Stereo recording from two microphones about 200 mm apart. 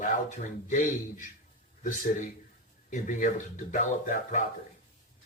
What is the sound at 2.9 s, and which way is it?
Speech, 40° left (ahead or behind).